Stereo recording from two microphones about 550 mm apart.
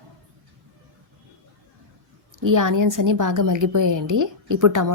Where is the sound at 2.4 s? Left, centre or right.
Right.